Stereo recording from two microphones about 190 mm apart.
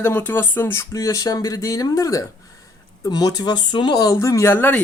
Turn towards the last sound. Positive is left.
turn(degrees=10)  # may be behind; listen again after turning